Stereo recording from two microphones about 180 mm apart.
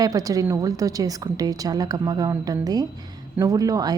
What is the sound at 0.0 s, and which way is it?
Speech, 20° right (ahead or behind).